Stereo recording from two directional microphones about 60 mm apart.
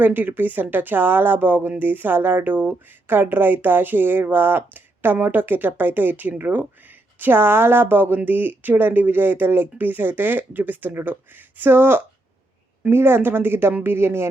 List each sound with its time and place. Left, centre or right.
0.0 s speech: right